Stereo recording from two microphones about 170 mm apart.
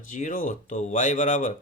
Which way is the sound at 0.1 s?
50° left (ahead or behind).